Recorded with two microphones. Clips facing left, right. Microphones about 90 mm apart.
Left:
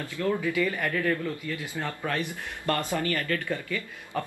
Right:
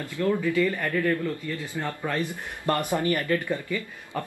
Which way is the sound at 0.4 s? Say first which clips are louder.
Right 3 dB; 10° left (ahead or behind).